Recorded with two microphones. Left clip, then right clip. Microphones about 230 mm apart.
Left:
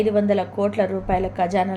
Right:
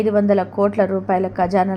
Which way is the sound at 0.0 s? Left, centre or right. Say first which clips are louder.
Right 3 dB; centre.